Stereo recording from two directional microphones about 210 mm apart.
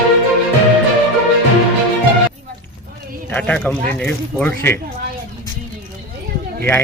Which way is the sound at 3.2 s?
5° left (ahead or behind).